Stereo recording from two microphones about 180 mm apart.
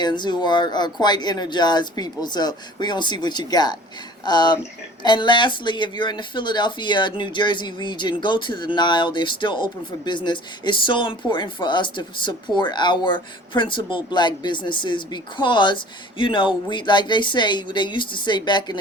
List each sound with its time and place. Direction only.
0.0 s speech: 25° left (ahead or behind)